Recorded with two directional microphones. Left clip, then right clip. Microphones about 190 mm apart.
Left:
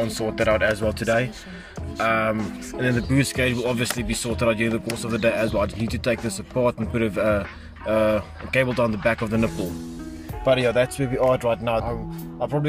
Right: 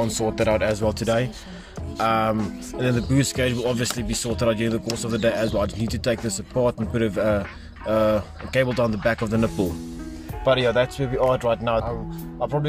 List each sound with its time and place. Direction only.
0.2 s speech: 15° right (ahead or behind)
1.0 s speech: centre (ahead or behind)
9.6 s speech: 45° right (ahead or behind)
10.4 s speech: centre (ahead or behind)